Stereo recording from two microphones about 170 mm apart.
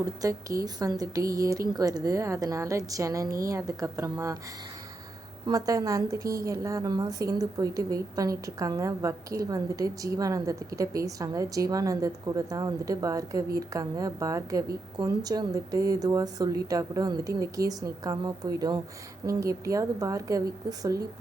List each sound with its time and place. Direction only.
0.0 s a woman's voice: 20° right (ahead or behind)
5.5 s a woman's voice: 20° right (ahead or behind)